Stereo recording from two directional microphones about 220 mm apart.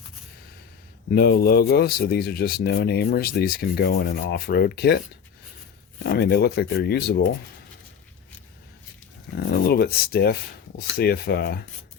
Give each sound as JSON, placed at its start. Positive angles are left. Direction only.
{"t": 1.1, "sound": "speech", "side_deg": 45}
{"t": 6.0, "sound": "speech", "side_deg": 50}
{"t": 9.3, "sound": "speech", "side_deg": 45}